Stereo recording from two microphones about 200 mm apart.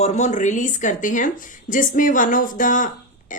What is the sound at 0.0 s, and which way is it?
Speech, 35° left (ahead or behind).